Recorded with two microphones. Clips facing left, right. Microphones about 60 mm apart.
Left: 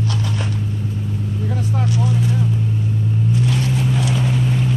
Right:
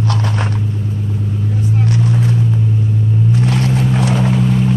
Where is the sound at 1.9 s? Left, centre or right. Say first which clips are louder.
Right 3 dB; right.